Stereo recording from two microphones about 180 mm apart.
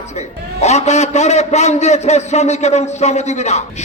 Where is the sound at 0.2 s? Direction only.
40° left (ahead or behind).